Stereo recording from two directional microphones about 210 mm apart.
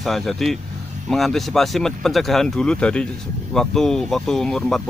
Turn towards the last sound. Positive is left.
turn(degrees=0)  # may be behind; listen again after turning